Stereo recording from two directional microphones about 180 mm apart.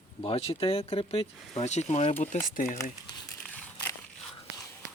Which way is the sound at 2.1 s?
10° left (ahead or behind).